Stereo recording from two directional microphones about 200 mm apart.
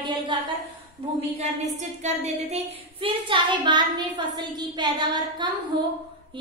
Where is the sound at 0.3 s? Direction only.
25° right (ahead or behind).